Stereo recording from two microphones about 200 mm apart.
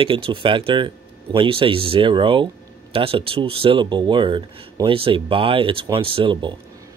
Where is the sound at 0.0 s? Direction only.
25° right (ahead or behind).